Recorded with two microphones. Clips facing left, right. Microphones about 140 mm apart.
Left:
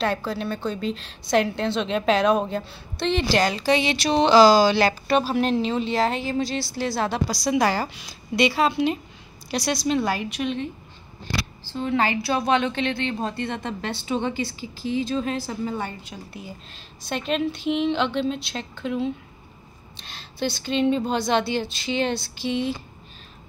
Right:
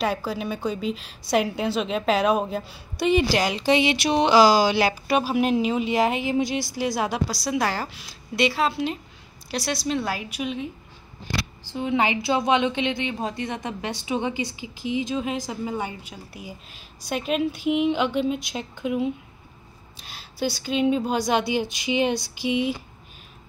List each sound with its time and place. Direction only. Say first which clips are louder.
0.0 s a woman's voice: left 1 dB; 5° right (ahead or behind)